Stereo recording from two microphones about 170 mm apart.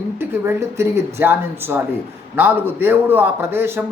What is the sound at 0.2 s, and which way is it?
Speech, 15° right (ahead or behind).